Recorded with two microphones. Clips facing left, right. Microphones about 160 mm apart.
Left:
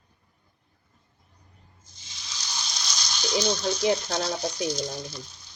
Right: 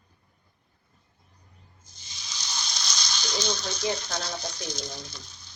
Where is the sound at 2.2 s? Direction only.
Centre (ahead or behind).